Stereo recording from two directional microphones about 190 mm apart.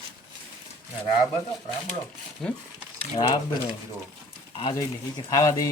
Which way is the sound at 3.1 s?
25° left (ahead or behind).